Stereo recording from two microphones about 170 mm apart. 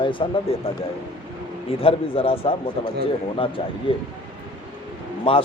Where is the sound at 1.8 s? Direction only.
35° left (ahead or behind).